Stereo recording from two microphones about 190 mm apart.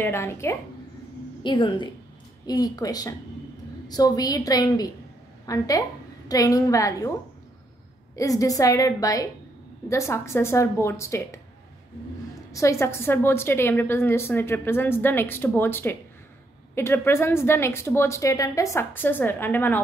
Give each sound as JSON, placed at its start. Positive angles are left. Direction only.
{"t": 0.0, "sound": "a woman's voice", "side_deg": 15}
{"t": 1.4, "sound": "a woman's voice", "side_deg": 25}
{"t": 8.2, "sound": "a woman's voice", "side_deg": 15}
{"t": 12.5, "sound": "a woman's voice", "side_deg": 15}